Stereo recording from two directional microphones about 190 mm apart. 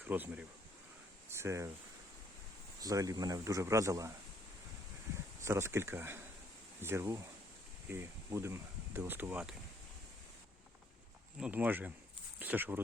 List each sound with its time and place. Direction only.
0.0 s speech: 10° right (ahead or behind)
2.8 s speech: 20° right (ahead or behind)
5.4 s speech: 15° right (ahead or behind)
11.3 s speech: 5° right (ahead or behind)